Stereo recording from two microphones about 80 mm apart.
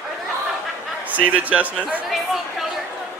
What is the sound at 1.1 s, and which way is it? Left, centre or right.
Speech, centre.